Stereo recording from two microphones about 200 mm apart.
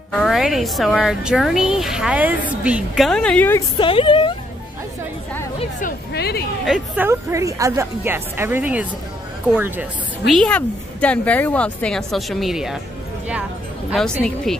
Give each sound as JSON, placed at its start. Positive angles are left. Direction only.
{"t": 0.1, "sound": "speech", "side_deg": 0}
{"t": 3.7, "sound": "speech", "side_deg": 25}
{"t": 5.6, "sound": "speech", "side_deg": 40}
{"t": 6.6, "sound": "speech", "side_deg": -5}
{"t": 13.8, "sound": "speech", "side_deg": 0}